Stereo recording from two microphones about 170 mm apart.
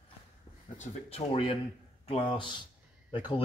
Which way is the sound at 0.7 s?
35° left (ahead or behind).